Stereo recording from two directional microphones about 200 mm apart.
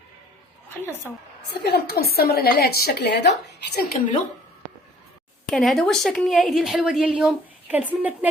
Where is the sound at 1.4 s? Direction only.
55° left (ahead or behind).